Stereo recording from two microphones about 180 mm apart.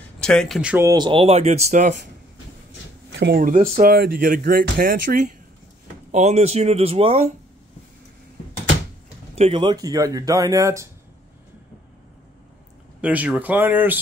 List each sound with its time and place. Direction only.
0.2 s speech: 5° left (ahead or behind)
0.8 s speech: 25° right (ahead or behind); by 2.0 s 40° right (ahead or behind)
3.1 s a sound: 70° right (ahead or behind)
3.3 s speech: 50° right (ahead or behind)
6.1 s speech: 35° right (ahead or behind)
9.3 s speech: 30° right (ahead or behind)
13.0 s speech: 10° right (ahead or behind)